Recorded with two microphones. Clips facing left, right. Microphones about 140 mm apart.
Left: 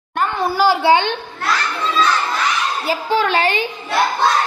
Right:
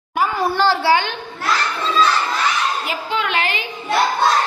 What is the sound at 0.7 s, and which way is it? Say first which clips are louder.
Speech: left 5 dB; 25° left (ahead or behind).